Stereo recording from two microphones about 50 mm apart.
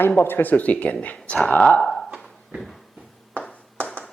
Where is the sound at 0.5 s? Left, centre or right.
Left.